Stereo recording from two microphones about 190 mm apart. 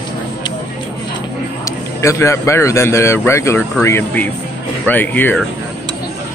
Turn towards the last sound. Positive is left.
turn(degrees=10)  # may be behind; listen again after turning